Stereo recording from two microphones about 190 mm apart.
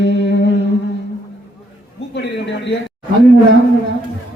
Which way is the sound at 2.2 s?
70° left (ahead or behind).